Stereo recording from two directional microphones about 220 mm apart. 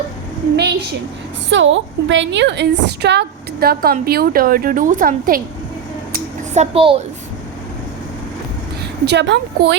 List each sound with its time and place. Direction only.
1.5 s a woman's voice: 60° right (ahead or behind); by 5.4 s 40° right (ahead or behind)
6.1 s a sound: 30° right (ahead or behind)
9.0 s a woman's voice: 50° right (ahead or behind)